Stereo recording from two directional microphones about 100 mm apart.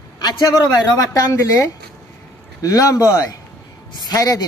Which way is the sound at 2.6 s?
35° left (ahead or behind).